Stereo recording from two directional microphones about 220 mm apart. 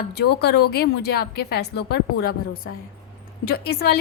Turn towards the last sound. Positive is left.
turn(degrees=45)  # may be behind; listen again after turning